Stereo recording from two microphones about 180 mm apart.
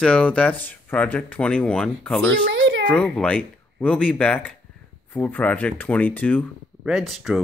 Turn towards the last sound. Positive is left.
turn(degrees=0)  # may be behind; listen again after turning